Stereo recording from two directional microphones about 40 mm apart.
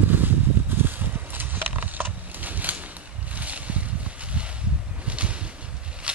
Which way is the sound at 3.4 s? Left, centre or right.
Right.